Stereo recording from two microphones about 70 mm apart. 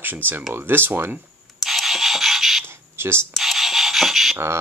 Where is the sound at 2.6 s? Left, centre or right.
Right.